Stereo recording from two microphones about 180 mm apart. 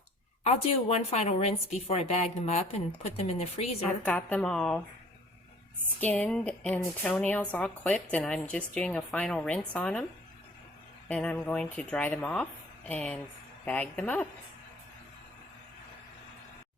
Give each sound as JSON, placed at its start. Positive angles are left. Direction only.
{"t": 0.4, "sound": "a woman's voice", "side_deg": 35}
{"t": 3.8, "sound": "a woman's voice", "side_deg": 5}
{"t": 6.0, "sound": "speech", "side_deg": 10}
{"t": 11.1, "sound": "a woman's voice", "side_deg": 5}